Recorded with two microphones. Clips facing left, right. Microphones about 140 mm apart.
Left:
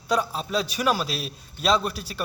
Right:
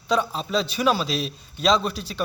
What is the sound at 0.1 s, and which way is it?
A man's voice, 10° left (ahead or behind).